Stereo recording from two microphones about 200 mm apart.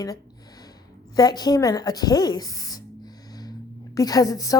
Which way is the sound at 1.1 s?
20° left (ahead or behind).